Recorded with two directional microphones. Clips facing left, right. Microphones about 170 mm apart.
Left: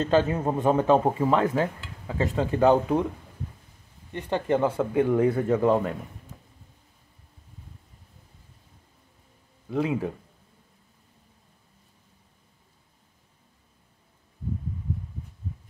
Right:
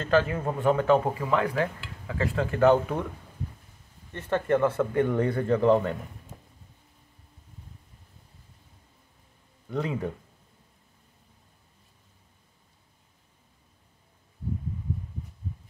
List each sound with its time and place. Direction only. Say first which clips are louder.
0.0 s speech: left 2 dB; 20° left (ahead or behind)
4.1 s speech: even; 15° left (ahead or behind)
9.7 s speech: left 4 dB; 10° left (ahead or behind)